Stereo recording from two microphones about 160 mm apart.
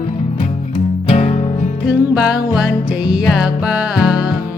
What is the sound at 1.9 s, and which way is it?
Music, 5° right (ahead or behind).